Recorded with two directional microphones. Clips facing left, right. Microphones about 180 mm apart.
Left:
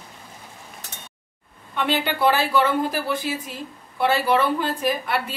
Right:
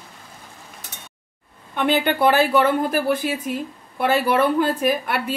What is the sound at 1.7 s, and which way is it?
A woman's voice, 55° right (ahead or behind).